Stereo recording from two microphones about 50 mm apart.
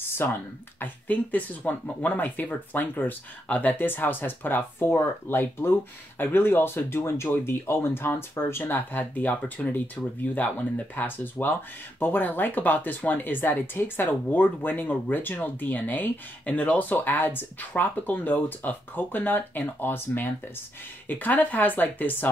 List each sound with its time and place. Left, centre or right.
0.2 s speech: left
8.7 s speech: left
16.9 s speech: left